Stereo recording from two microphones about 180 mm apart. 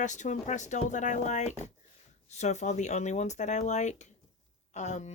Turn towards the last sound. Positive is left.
turn(degrees=40)  # may be behind; listen again after turning